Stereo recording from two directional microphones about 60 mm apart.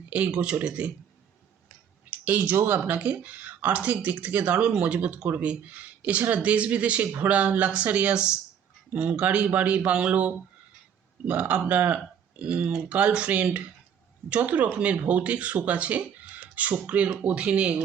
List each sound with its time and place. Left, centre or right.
0.1 s speech: centre
2.0 s a sound: right
2.6 s speech: right